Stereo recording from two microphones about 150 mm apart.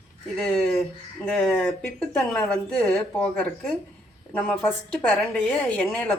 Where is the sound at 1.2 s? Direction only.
10° left (ahead or behind).